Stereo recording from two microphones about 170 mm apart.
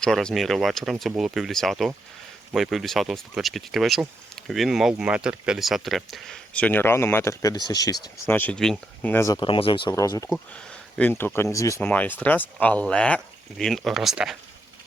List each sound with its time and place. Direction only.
0.0 s speech: 5° left (ahead or behind); by 7.9 s 20° left (ahead or behind)
8.3 s speech: 10° left (ahead or behind); by 9.9 s 30° left (ahead or behind)
9.9 s speech: 20° left (ahead or behind); by 14.3 s centre (ahead or behind)